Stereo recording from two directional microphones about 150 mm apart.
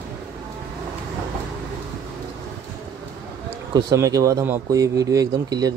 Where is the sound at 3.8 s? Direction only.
20° right (ahead or behind).